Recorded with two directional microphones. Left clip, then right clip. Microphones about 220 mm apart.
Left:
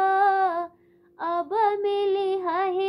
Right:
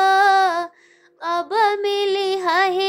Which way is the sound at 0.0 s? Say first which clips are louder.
Right 6 dB; 40° right (ahead or behind).